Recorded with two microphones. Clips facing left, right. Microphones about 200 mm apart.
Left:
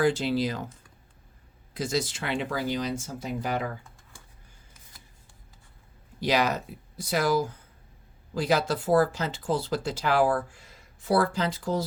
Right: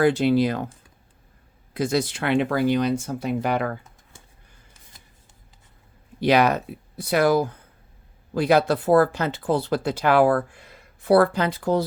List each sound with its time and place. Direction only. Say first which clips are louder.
0.0 s speech: right 6 dB; 60° right (ahead or behind)
1.7 s speech: right 6 dB; 60° right (ahead or behind)
6.1 s speech: right 7 dB; 60° right (ahead or behind)